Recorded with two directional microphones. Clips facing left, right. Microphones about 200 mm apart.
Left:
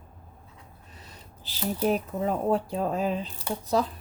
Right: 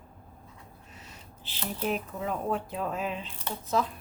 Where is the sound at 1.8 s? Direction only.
35° left (ahead or behind).